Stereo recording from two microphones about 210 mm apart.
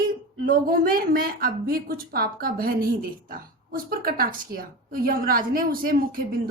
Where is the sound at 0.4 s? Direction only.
45° right (ahead or behind).